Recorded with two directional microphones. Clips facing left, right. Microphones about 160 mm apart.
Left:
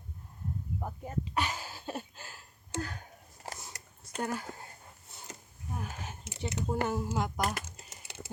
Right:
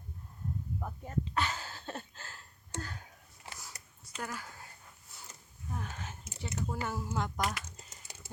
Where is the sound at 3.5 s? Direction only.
40° left (ahead or behind).